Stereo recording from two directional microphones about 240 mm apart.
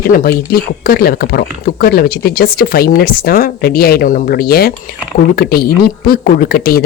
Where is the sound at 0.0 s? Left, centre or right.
Left.